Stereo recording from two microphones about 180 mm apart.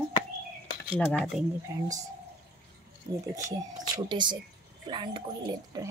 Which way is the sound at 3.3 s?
15° right (ahead or behind).